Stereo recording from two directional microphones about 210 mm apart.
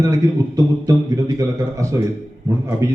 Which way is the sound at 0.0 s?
15° right (ahead or behind).